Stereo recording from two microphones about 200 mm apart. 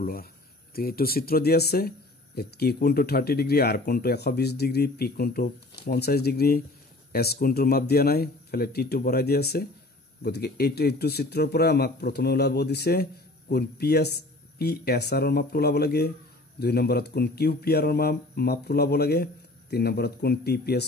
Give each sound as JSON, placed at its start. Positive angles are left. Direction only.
{"t": 0.0, "sound": "speech", "side_deg": 45}